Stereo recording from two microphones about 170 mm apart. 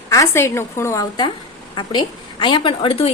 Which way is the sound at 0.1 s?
15° left (ahead or behind).